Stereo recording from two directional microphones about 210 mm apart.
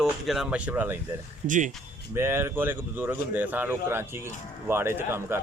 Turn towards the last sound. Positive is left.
turn(degrees=-10)  # may be behind; listen again after turning